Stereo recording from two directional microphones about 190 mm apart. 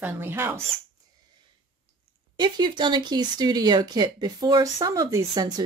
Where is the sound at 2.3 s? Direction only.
25° right (ahead or behind).